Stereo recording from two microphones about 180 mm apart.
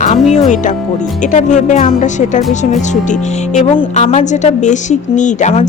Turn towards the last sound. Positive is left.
turn(degrees=40)  # may be behind; listen again after turning